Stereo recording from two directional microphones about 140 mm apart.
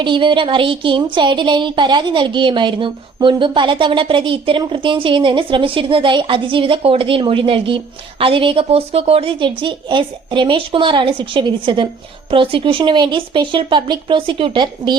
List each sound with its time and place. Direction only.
0.0 s speech: 35° right (ahead or behind)